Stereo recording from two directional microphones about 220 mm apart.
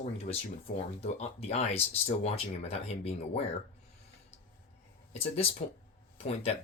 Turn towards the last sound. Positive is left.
turn(degrees=30)  # may be behind; listen again after turning